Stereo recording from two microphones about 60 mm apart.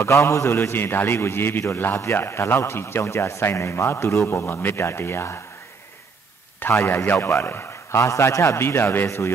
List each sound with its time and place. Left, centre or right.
0.0 s a man's voice: left
6.7 s a man's voice: left
8.0 s a man's voice: left
8.5 s a man's voice: left